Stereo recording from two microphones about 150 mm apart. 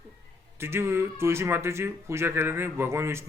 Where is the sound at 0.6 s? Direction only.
15° right (ahead or behind).